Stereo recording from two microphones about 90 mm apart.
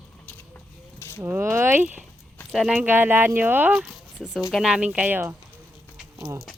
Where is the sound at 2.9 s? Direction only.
20° right (ahead or behind).